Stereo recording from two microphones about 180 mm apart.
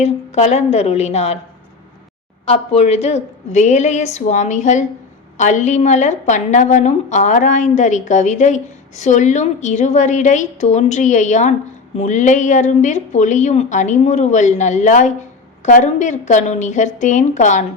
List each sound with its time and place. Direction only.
0.0 s a woman's voice: 40° left (ahead or behind)
2.5 s a woman's voice: 40° left (ahead or behind)